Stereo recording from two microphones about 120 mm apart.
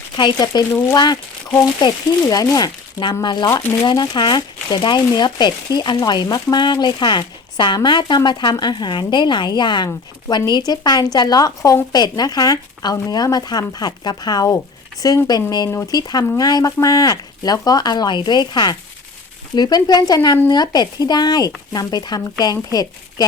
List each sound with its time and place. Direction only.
0.2 s speech: 40° left (ahead or behind)